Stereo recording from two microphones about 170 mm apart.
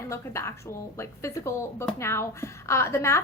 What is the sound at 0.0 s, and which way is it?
A woman's voice, 15° left (ahead or behind).